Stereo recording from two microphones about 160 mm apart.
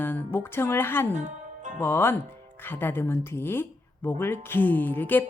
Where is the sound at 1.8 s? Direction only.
15° left (ahead or behind).